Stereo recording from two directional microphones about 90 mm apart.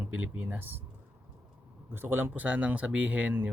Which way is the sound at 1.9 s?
20° right (ahead or behind).